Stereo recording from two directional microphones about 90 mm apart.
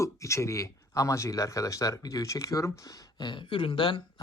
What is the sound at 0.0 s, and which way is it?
Speech, 35° left (ahead or behind).